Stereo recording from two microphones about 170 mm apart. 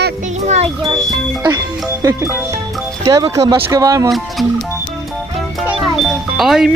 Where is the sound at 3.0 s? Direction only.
20° right (ahead or behind).